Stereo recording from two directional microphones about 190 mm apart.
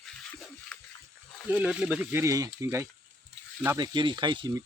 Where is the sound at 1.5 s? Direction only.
5° right (ahead or behind).